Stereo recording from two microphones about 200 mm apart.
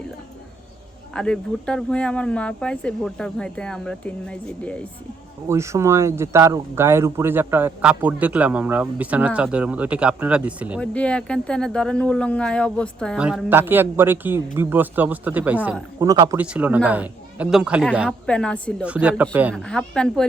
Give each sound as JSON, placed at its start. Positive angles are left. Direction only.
{"t": 1.1, "sound": "speech", "side_deg": 5}
{"t": 5.5, "sound": "speech", "side_deg": -15}
{"t": 10.8, "sound": "speech", "side_deg": 5}
{"t": 16.0, "sound": "speech", "side_deg": -20}
{"t": 16.4, "sound": "speech", "side_deg": -5}
{"t": 18.3, "sound": "speech", "side_deg": 5}
{"t": 18.9, "sound": "speech", "side_deg": -5}
{"t": 19.5, "sound": "speech", "side_deg": 5}